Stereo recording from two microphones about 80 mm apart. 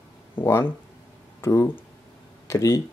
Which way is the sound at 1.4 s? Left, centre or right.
Left.